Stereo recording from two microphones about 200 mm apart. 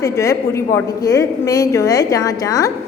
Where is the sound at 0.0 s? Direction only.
15° left (ahead or behind).